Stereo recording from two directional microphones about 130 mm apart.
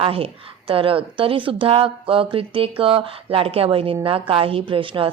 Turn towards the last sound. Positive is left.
turn(degrees=-45)  # may be behind; listen again after turning